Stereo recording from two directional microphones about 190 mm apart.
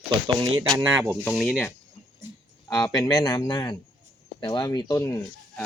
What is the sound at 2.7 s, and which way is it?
Speech, 20° left (ahead or behind).